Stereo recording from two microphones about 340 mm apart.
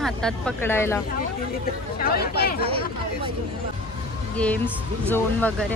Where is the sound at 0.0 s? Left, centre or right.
Centre.